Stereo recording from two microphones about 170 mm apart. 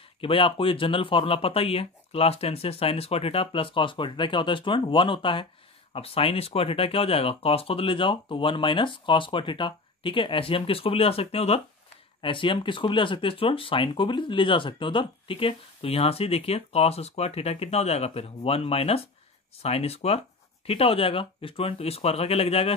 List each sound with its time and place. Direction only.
0.2 s speech: 30° left (ahead or behind)